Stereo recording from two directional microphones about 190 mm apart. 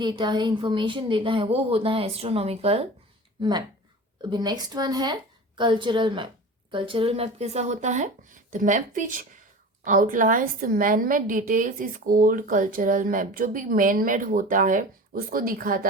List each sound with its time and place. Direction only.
0.0 s a woman's voice: 25° right (ahead or behind)
4.2 s a woman's voice: 20° right (ahead or behind); by 15.9 s 50° right (ahead or behind)